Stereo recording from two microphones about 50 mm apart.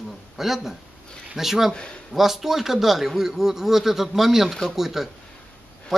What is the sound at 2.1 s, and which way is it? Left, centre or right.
A man's voice, centre.